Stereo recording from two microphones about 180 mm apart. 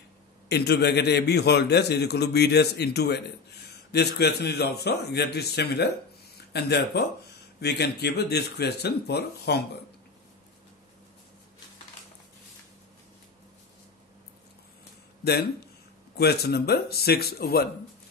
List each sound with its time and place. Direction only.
0.5 s a man's voice: 65° left (ahead or behind)
16.2 s a man's voice: 60° left (ahead or behind)